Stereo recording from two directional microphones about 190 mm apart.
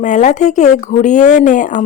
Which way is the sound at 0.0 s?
40° left (ahead or behind).